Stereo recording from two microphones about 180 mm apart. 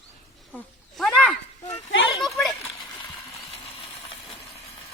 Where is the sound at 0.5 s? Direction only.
5° left (ahead or behind).